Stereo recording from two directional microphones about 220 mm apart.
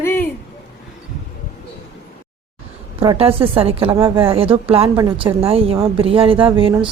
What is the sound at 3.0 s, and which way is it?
A woman's voice, 25° right (ahead or behind).